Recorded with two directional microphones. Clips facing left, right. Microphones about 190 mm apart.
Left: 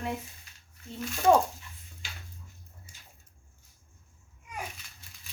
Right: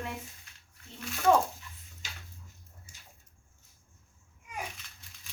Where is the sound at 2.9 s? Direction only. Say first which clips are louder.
Left 1 dB; 45° right (ahead or behind).